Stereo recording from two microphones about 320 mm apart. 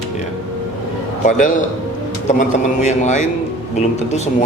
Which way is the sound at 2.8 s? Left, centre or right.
Left.